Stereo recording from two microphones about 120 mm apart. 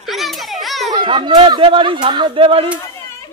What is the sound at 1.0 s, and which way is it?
Speech, 45° right (ahead or behind).